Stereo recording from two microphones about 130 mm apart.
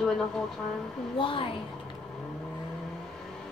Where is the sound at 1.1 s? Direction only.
40° left (ahead or behind).